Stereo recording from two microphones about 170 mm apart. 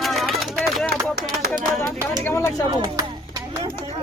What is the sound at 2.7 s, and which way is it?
Speech, 20° right (ahead or behind).